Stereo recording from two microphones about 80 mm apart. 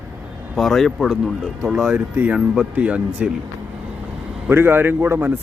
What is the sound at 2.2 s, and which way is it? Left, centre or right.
A man's voice, centre.